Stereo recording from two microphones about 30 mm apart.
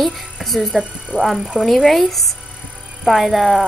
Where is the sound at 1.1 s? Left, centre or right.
Left.